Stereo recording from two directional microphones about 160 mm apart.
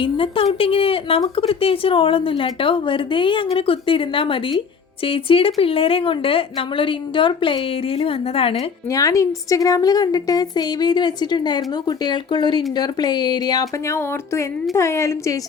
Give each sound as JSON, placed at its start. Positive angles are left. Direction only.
{"t": 0.0, "sound": "a woman's voice", "side_deg": 35}
{"t": 8.9, "sound": "a woman's voice", "side_deg": 20}